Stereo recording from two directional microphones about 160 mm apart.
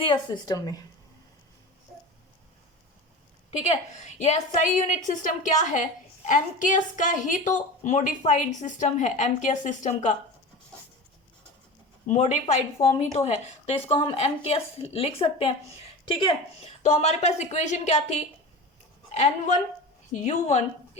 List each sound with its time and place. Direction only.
0.0 s a woman's voice: 30° left (ahead or behind)
3.7 s a woman's voice: 45° left (ahead or behind)
12.0 s a woman's voice: 45° left (ahead or behind)